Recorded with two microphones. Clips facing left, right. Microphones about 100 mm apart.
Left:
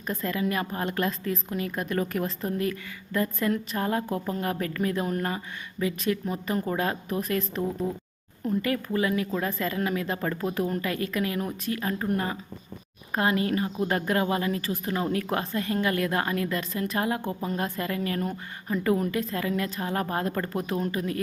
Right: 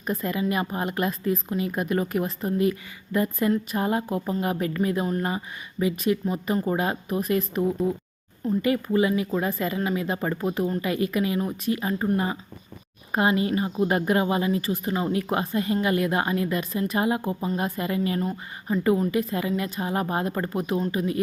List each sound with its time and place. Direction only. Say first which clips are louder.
0.1 s speech: right 2 dB; 5° right (ahead or behind)
18.9 s speech: right 3 dB; centre (ahead or behind)